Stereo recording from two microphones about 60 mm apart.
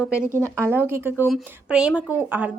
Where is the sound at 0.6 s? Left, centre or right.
Right.